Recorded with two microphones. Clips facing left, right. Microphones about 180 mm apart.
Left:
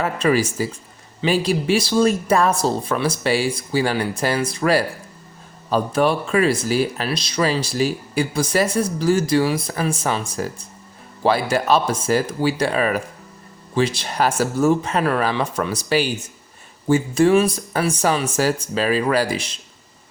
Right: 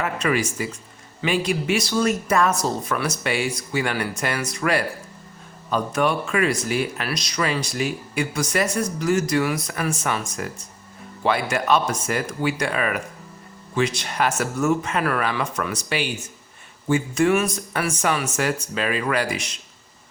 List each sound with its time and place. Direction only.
0.0 s speech: 35° left (ahead or behind)